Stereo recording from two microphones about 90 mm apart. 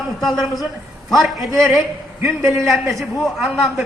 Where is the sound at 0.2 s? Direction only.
Centre (ahead or behind).